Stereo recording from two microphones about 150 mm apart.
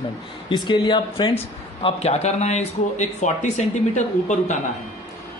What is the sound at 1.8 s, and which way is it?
A man's voice, 45° left (ahead or behind).